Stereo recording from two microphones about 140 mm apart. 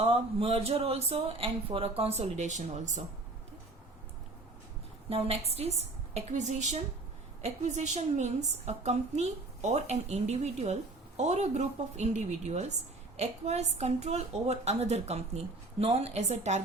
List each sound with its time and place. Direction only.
0.0 s a woman's voice: 45° right (ahead or behind)
5.0 s a woman's voice: 45° right (ahead or behind)